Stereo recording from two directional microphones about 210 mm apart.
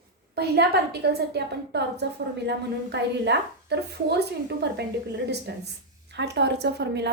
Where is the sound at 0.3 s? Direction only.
50° right (ahead or behind).